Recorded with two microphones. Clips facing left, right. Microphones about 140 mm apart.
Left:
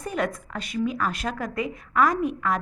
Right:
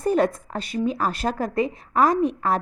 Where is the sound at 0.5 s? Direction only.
30° right (ahead or behind).